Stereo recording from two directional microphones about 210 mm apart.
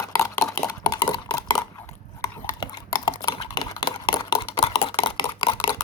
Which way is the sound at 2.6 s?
20° left (ahead or behind).